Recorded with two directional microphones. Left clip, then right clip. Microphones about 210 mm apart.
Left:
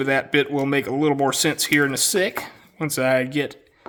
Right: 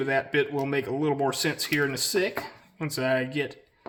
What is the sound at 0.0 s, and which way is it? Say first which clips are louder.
A man's voice: left 5 dB; 45° left (ahead or behind).